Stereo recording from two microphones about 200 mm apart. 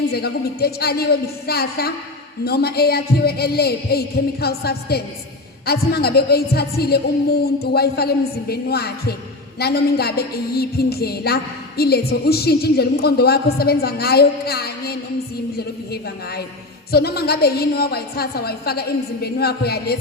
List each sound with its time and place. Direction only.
0.1 s speech: 50° left (ahead or behind)